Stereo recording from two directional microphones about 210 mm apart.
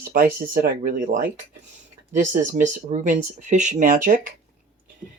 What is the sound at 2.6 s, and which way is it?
Speech, 35° right (ahead or behind).